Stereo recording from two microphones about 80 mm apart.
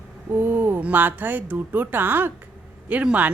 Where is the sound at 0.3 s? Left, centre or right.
Right.